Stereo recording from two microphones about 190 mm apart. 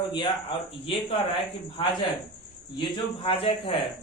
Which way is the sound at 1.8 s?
25° left (ahead or behind).